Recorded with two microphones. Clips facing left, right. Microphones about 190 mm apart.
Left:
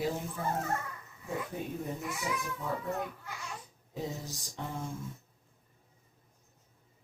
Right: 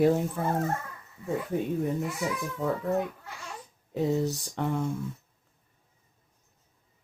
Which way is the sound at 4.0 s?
65° right (ahead or behind).